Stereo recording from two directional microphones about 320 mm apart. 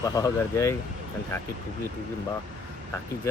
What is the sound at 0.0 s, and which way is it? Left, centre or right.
Speech, centre.